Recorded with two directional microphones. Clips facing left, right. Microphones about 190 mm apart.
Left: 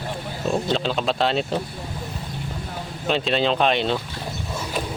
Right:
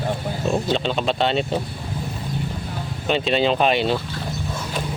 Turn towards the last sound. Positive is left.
turn(degrees=-5)  # may be behind; listen again after turning